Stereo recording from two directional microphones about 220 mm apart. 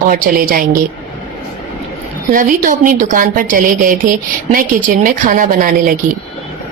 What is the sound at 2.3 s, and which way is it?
A woman's voice, 40° right (ahead or behind).